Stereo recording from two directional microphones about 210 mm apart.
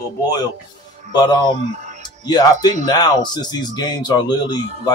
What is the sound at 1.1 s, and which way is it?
Speech, 20° left (ahead or behind).